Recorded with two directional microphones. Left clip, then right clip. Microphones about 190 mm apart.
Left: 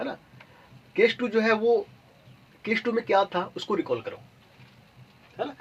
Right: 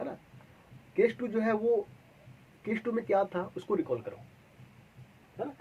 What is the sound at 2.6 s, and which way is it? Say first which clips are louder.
A man's voice: left 7 dB; 40° left (ahead or behind).